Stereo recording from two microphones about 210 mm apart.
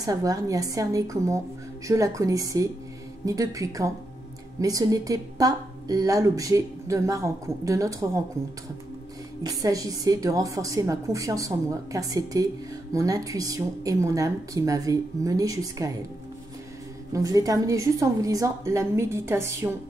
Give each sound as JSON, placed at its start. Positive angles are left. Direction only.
{"t": 0.0, "sound": "a woman's voice", "side_deg": -15}
{"t": 9.4, "sound": "a woman's voice", "side_deg": -15}
{"t": 17.1, "sound": "a woman's voice", "side_deg": -15}